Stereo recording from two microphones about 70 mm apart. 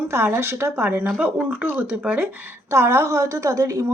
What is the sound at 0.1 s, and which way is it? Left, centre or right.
Speech, right.